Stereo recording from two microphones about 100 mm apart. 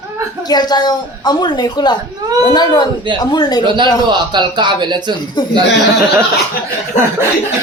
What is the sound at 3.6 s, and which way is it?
Speech, 50° right (ahead or behind).